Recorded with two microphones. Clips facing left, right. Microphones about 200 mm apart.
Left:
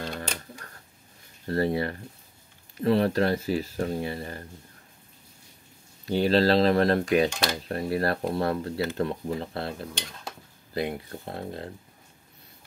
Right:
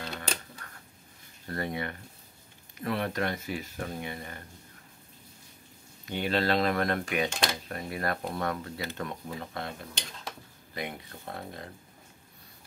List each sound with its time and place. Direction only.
1.5 s speech: 30° left (ahead or behind)
6.0 s speech: 35° left (ahead or behind)